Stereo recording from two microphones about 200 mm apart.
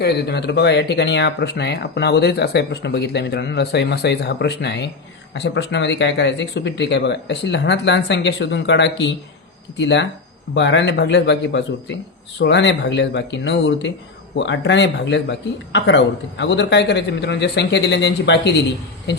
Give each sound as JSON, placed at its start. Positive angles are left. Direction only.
{"t": 0.0, "sound": "speech", "side_deg": 55}